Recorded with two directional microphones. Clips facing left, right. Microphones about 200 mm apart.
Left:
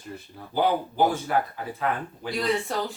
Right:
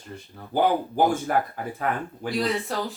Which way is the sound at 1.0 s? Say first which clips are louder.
Right 1 dB; 50° right (ahead or behind).